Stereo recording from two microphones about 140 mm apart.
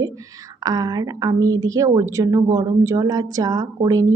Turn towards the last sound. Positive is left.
turn(degrees=-25)  # may be behind; listen again after turning